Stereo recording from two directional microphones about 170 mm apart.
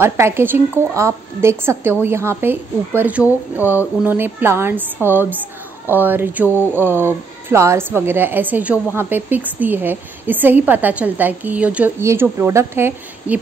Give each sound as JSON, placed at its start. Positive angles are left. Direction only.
{"t": 0.0, "sound": "speech", "side_deg": -15}